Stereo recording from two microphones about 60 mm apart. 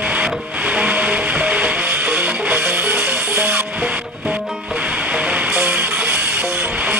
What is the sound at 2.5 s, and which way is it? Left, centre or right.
Music, right.